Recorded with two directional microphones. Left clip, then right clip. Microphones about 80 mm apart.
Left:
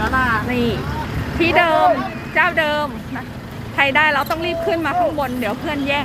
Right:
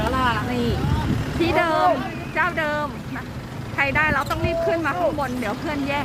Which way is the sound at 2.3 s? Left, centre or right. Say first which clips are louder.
Left 6 dB; left.